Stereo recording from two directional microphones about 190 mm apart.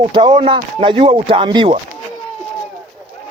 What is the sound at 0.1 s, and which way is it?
Speech, 25° right (ahead or behind).